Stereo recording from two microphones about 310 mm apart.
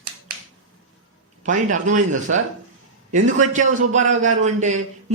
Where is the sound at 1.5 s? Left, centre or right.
Right.